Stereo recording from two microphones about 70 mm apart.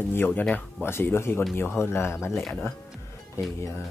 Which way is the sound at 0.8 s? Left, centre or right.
Left.